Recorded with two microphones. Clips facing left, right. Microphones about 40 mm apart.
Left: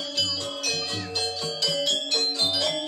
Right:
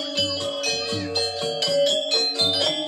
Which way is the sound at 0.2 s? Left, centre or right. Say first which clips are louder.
Right 4 dB; right.